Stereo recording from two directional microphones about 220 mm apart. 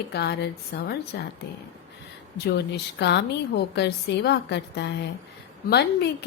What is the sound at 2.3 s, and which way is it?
A woman's voice, 50° left (ahead or behind).